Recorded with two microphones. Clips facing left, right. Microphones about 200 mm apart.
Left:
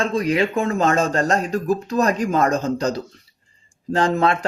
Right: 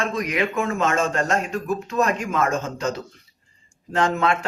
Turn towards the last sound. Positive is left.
turn(degrees=35)  # may be behind; listen again after turning